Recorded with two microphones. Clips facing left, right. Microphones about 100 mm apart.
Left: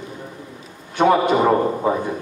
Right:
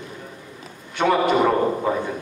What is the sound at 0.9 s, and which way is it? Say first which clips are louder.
A man's voice: left 3 dB; 20° left (ahead or behind).